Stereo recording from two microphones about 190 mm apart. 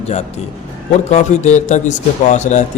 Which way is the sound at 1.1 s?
35° left (ahead or behind).